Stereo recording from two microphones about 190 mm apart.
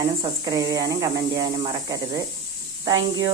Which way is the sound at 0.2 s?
20° right (ahead or behind).